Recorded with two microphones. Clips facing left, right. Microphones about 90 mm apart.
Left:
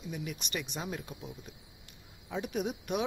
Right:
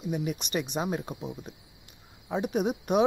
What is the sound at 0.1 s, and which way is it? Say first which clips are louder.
Speech: right 8 dB; 25° right (ahead or behind).